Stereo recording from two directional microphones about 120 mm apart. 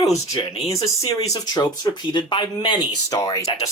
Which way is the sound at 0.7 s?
30° left (ahead or behind).